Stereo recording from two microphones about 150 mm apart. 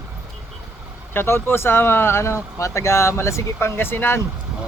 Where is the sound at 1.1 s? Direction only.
15° left (ahead or behind).